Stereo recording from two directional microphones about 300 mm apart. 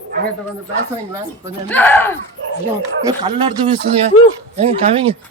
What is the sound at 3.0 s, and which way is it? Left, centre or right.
Speech, centre.